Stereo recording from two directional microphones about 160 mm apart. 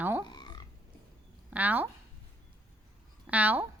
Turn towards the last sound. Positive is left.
turn(degrees=-10)  # may be behind; listen again after turning